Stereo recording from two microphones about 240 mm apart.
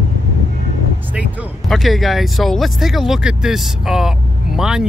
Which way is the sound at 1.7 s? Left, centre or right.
Centre.